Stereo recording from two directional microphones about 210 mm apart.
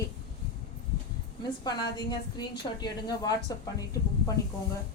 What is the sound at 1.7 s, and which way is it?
A woman's voice, 20° left (ahead or behind).